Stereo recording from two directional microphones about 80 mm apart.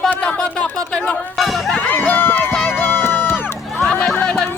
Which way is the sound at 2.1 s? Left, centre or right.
Left.